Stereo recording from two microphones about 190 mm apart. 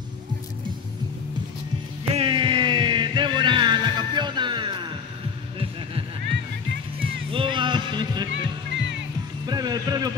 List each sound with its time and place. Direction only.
2.1 s music: 25° right (ahead or behind)
7.0 s music: 30° right (ahead or behind)
8.3 s music: 70° right (ahead or behind)
9.5 s music: 20° right (ahead or behind)